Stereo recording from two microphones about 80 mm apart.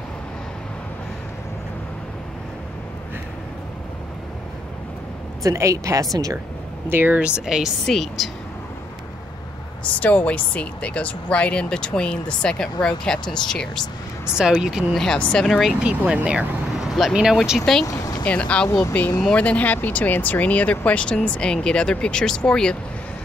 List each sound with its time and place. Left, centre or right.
5.4 s speech: right
6.9 s speech: right; by 7.7 s centre
7.8 s speech: centre
9.9 s speech: centre
14.3 s speech: centre
15.0 s speech: centre
15.8 s speech: centre
17.8 s vehicle: left
18.2 s speech: centre